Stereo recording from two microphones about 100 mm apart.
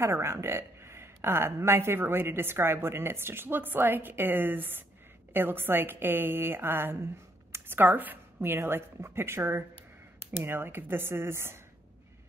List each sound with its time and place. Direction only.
0.0 s a woman's voice: 30° right (ahead or behind)